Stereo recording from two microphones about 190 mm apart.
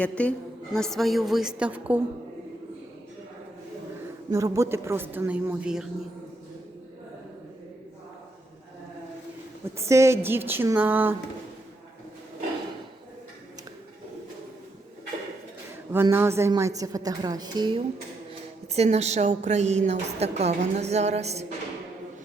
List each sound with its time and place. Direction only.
0.0 s a woman's voice: 5° left (ahead or behind)
4.3 s a woman's voice: 15° right (ahead or behind)
9.7 s a woman's voice: 15° right (ahead or behind)
15.9 s a woman's voice: 10° right (ahead or behind)
18.7 s a woman's voice: 35° right (ahead or behind)